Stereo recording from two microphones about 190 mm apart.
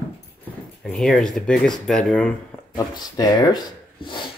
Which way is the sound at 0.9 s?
Centre (ahead or behind).